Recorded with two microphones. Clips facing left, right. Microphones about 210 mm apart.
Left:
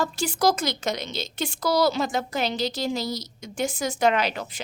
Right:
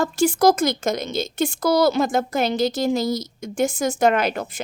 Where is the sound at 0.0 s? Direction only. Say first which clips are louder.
Right 6 dB; 50° right (ahead or behind).